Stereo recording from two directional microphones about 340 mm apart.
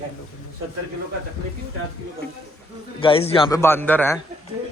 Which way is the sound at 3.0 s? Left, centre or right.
Centre.